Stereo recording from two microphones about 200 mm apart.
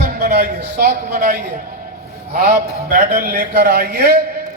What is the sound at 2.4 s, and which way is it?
A man's voice, 45° right (ahead or behind).